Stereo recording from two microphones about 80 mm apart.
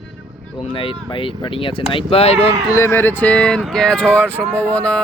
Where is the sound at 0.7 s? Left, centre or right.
Left.